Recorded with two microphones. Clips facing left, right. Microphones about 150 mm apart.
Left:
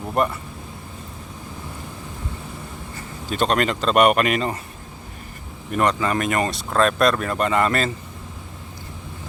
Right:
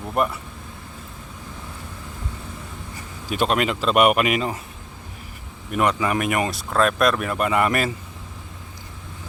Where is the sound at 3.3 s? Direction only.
5° right (ahead or behind).